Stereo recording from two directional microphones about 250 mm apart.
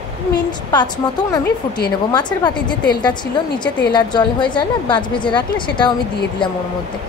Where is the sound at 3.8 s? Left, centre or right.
Centre.